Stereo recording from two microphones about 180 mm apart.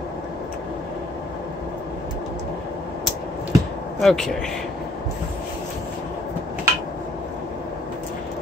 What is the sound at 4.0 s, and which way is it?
Speech, centre (ahead or behind).